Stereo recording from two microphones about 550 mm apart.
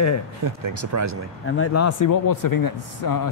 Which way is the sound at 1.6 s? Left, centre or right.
Left.